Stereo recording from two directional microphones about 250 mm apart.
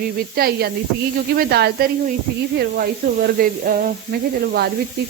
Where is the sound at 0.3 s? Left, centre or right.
Right.